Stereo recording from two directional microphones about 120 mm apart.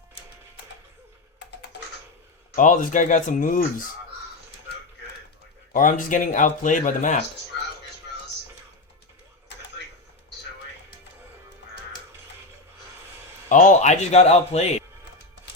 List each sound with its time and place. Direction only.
2.6 s speech: 90° left
5.8 s speech: 90° left
13.5 s speech: 90° left; by 14.8 s 65° left (ahead or behind)